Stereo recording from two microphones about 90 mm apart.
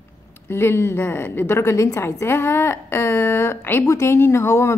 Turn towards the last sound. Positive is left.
turn(degrees=30)  # may be behind; listen again after turning